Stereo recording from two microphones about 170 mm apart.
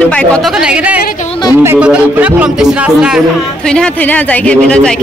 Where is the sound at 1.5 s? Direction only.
10° right (ahead or behind).